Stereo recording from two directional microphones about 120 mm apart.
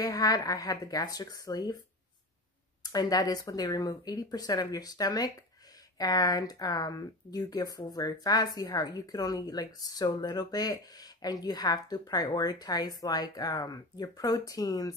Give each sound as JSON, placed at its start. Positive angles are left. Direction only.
{"t": 0.0, "sound": "speech", "side_deg": 30}
{"t": 2.8, "sound": "speech", "side_deg": 30}